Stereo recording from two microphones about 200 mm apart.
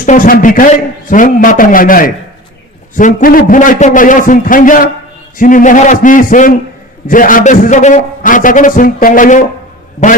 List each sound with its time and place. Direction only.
0.0 s a man's voice: 40° left (ahead or behind)